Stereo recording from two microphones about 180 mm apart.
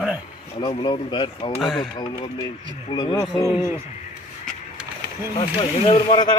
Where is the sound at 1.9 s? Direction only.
25° left (ahead or behind).